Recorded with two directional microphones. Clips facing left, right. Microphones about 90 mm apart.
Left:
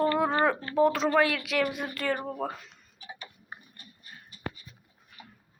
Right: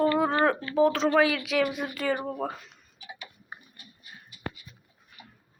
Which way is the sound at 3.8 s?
35° left (ahead or behind).